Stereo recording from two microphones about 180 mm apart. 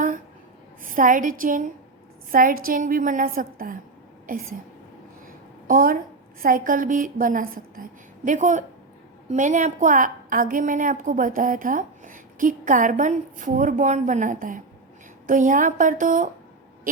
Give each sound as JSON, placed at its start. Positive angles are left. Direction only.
{"t": 0.8, "sound": "a woman's voice", "side_deg": -50}
{"t": 5.6, "sound": "a woman's voice", "side_deg": -50}